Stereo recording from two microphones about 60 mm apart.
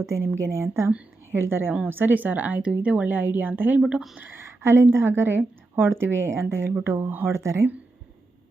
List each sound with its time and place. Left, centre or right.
0.0 s a woman's voice: right
3.8 s speech: centre
4.2 s speech: right
7.1 s a woman's voice: right
7.3 s speech: right